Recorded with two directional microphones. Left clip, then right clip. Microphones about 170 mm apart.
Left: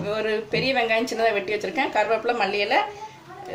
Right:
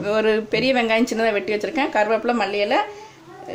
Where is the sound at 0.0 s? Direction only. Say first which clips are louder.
Right 6 dB; 40° right (ahead or behind).